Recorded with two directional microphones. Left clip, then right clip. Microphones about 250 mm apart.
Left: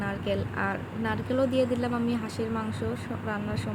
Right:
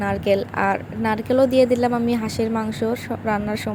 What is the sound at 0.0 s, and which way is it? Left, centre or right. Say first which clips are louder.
A woman's voice: right 11 dB; right.